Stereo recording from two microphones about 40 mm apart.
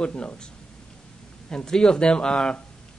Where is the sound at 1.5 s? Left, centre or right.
Centre.